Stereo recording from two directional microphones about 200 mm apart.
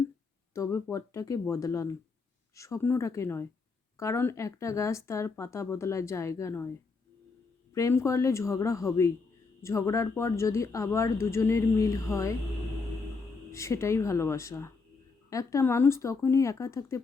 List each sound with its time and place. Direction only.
0.5 s speech: 15° left (ahead or behind)
7.7 s speech: 15° left (ahead or behind)
13.5 s speech: 15° left (ahead or behind)